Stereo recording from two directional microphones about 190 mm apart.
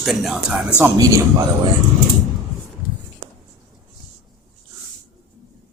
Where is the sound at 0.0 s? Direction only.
Centre (ahead or behind).